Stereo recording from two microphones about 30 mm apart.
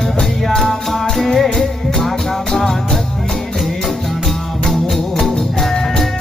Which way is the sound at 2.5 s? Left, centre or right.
Centre.